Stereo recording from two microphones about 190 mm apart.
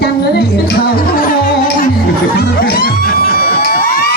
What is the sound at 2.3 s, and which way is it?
Music, 55° left (ahead or behind).